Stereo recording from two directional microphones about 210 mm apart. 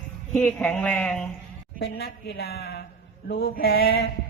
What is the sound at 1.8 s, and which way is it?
A woman's voice, 50° left (ahead or behind).